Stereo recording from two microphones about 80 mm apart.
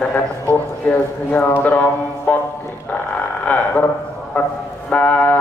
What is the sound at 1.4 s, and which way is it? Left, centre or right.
Speech, left.